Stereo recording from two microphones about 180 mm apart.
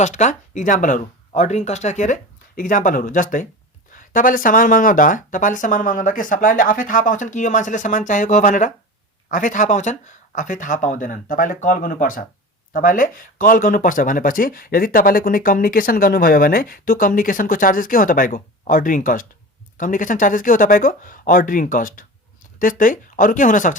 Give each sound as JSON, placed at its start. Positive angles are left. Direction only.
{"t": 0.0, "sound": "speech", "side_deg": 40}